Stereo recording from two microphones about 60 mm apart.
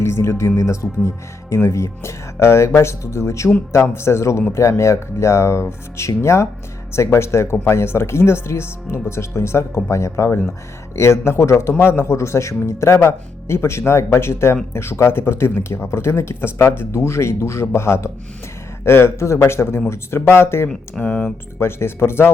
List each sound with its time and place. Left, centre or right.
0.0 s speech: left
21.0 s speech: left
21.6 s speech: left